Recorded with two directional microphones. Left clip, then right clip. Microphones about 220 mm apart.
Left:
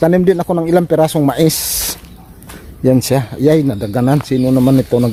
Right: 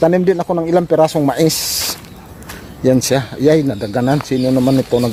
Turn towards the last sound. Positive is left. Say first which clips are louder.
# left 1 dB
turn(degrees=15)  # may be behind; listen again after turning